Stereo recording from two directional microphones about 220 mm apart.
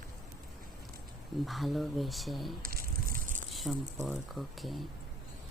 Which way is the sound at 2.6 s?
40° right (ahead or behind).